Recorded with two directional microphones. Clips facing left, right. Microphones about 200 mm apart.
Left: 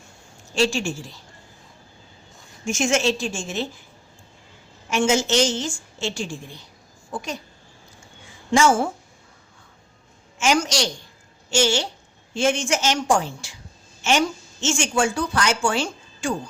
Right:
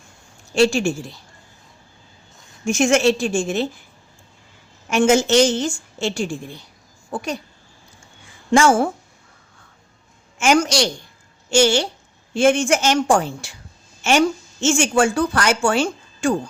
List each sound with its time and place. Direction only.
0.5 s a woman's voice: 55° right (ahead or behind)
2.6 s a woman's voice: 55° right (ahead or behind)
4.9 s a woman's voice: 55° right (ahead or behind)
8.5 s a woman's voice: 55° right (ahead or behind)
10.3 s a woman's voice: 55° right (ahead or behind)